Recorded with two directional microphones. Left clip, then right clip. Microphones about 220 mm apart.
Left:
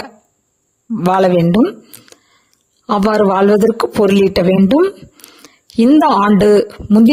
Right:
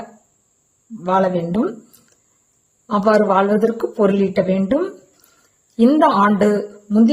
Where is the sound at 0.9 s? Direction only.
45° left (ahead or behind).